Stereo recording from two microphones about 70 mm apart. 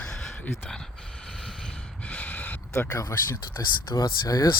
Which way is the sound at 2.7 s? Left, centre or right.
Left.